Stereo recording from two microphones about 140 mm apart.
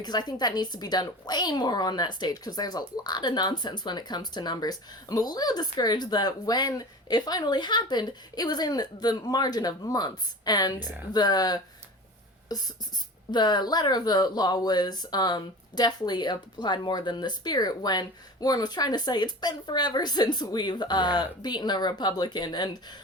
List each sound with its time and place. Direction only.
0.0 s a woman's voice: 30° left (ahead or behind)